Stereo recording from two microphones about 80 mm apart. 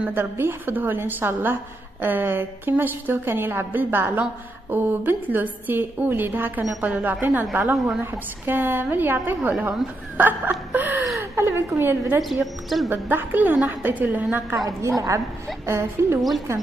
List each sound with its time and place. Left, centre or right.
0.1 s a woman's voice: right
11.1 s a woman's voice: right
12.2 s a woman's voice: centre
12.9 s a woman's voice: right
14.8 s a woman's voice: right
16.2 s a woman's voice: centre